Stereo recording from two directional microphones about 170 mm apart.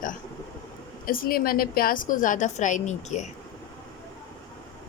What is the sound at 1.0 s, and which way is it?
A woman's voice, 60° left (ahead or behind).